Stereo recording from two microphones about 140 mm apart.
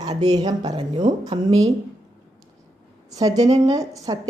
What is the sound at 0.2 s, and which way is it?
Speech, 30° right (ahead or behind).